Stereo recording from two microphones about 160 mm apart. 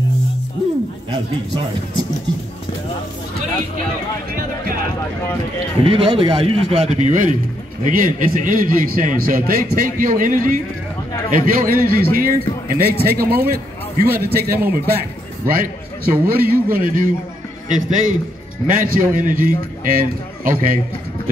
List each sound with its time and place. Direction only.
5.9 s a man's voice: 35° right (ahead or behind)
7.8 s a man's voice: 55° right (ahead or behind); by 15.0 s 75° right (ahead or behind)
15.4 s a man's voice: 60° right (ahead or behind)
17.7 s a man's voice: 50° right (ahead or behind)